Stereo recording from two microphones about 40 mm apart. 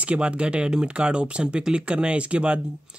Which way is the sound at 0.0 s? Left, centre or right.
Right.